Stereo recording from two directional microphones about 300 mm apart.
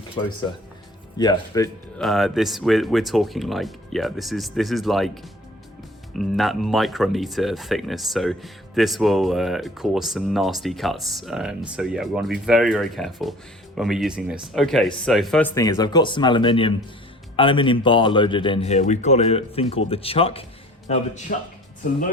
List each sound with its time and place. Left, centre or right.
0.2 s speech: centre
2.0 s speech: centre
6.1 s speech: centre; by 21.3 s left